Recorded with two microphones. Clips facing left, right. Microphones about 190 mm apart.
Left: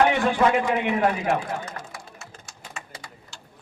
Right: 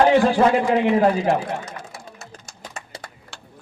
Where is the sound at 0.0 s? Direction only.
35° right (ahead or behind).